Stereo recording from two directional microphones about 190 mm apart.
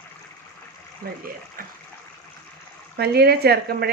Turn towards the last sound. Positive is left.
turn(degrees=-55)  # may be behind; listen again after turning